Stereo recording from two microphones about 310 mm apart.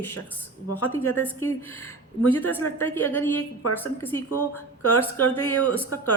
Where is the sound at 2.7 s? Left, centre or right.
Centre.